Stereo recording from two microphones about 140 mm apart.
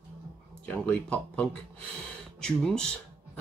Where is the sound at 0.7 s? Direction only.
10° left (ahead or behind).